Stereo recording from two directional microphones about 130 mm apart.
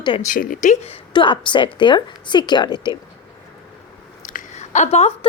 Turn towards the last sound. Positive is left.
turn(degrees=55)  # may be behind; listen again after turning